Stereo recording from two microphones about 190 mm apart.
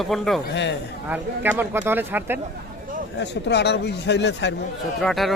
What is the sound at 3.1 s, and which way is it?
Speech, 65° left (ahead or behind).